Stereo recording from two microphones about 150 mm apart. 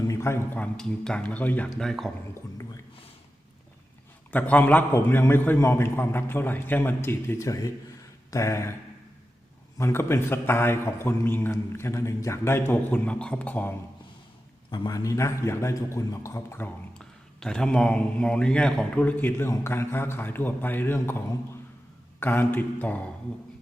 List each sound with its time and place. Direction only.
0.0 s a man's voice: 20° left (ahead or behind); by 2.1 s centre (ahead or behind)
4.3 s a man's voice: 10° left (ahead or behind)
9.7 s a man's voice: 15° left (ahead or behind)
14.7 s a man's voice: 25° left (ahead or behind)
17.4 s a man's voice: 5° left (ahead or behind)
22.2 s a man's voice: 15° left (ahead or behind)